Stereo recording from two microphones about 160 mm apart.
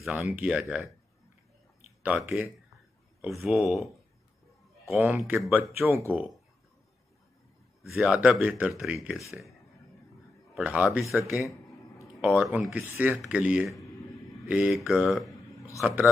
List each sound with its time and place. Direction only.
0.0 s speech: centre (ahead or behind)
2.0 s speech: 5° right (ahead or behind)
4.9 s speech: 10° right (ahead or behind)
8.0 s speech: 5° right (ahead or behind)
10.5 s a man's voice: 10° right (ahead or behind)